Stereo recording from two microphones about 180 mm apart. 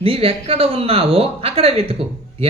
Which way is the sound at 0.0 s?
30° right (ahead or behind).